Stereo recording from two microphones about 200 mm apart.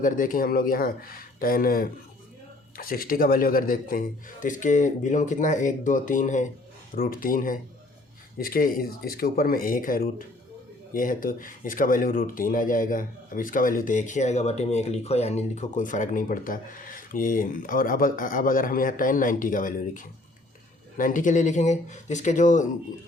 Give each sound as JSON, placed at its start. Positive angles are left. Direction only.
{"t": 0.0, "sound": "a man's voice", "side_deg": 45}